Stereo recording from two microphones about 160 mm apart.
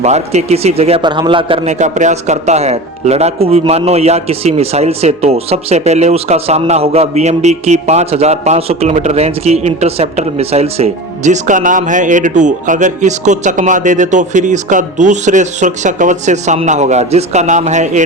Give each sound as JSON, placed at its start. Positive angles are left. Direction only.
{"t": 0.0, "sound": "a man's voice", "side_deg": -45}
{"t": 1.8, "sound": "a man's voice", "side_deg": -50}